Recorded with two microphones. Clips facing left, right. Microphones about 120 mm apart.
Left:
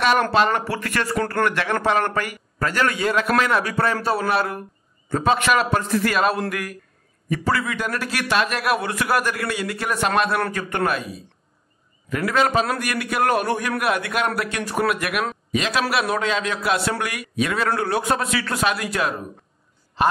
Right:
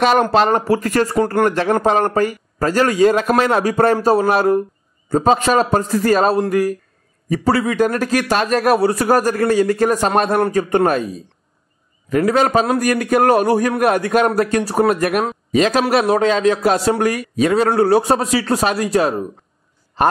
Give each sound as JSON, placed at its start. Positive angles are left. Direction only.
{"t": 0.3, "sound": "speech", "side_deg": -40}
{"t": 1.1, "sound": "speech", "side_deg": -15}
{"t": 1.4, "sound": "a man's voice", "side_deg": -35}